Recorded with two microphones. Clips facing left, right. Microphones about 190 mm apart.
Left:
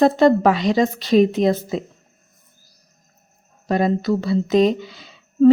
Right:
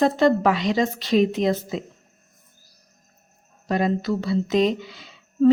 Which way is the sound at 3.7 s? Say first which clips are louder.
Left 4 dB; 40° left (ahead or behind).